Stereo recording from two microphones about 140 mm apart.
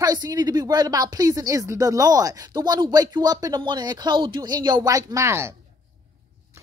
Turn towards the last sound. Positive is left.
turn(degrees=-20)  # may be behind; listen again after turning